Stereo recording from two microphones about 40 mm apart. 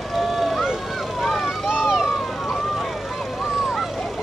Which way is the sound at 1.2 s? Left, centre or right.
Centre.